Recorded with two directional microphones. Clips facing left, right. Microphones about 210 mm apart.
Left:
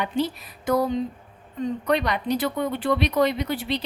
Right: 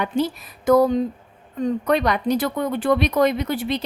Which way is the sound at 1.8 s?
50° right (ahead or behind).